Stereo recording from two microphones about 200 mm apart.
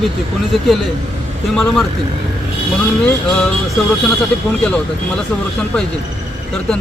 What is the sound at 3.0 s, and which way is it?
Speech, 5° left (ahead or behind).